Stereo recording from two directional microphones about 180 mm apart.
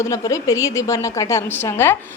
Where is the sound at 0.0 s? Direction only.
20° left (ahead or behind).